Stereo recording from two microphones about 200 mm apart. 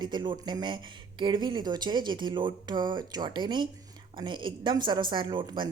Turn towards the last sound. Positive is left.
turn(degrees=-25)  # may be behind; listen again after turning